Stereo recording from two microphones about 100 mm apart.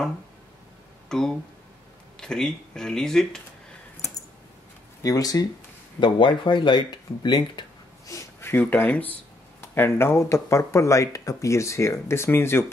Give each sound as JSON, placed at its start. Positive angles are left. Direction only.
{"t": 1.0, "sound": "a sound", "side_deg": 5}
{"t": 2.1, "sound": "speech", "side_deg": 5}
{"t": 5.0, "sound": "speech", "side_deg": 40}
{"t": 5.9, "sound": "speech", "side_deg": 55}
{"t": 8.1, "sound": "speech", "side_deg": 30}